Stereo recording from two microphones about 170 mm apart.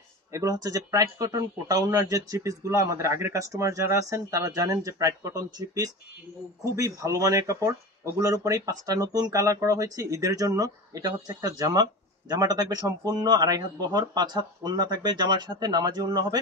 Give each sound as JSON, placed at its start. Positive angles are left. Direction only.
{"t": 0.3, "sound": "speech", "side_deg": -20}